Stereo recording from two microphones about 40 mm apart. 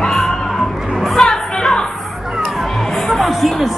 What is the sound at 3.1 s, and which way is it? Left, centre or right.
Music, centre.